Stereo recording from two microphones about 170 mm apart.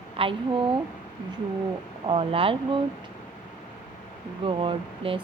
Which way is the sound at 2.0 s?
35° right (ahead or behind).